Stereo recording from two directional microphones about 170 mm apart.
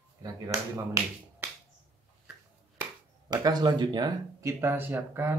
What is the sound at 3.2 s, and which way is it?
Speech, 25° right (ahead or behind).